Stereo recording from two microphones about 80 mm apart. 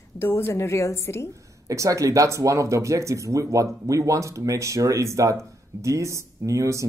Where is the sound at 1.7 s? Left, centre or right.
Right.